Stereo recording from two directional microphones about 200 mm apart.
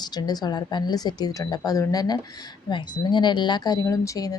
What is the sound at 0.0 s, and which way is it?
Speech, 20° left (ahead or behind).